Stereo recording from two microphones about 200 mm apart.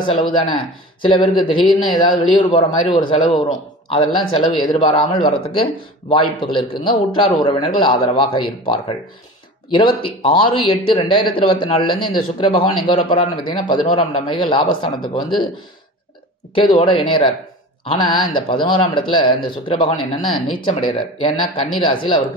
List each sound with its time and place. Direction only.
0.0 s speech: 25° left (ahead or behind)
16.5 s speech: 25° left (ahead or behind)